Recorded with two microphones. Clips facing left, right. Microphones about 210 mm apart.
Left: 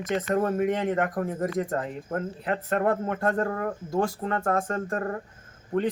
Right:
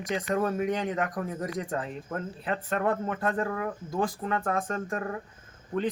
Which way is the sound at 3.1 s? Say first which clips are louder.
Left 3 dB; 45° left (ahead or behind).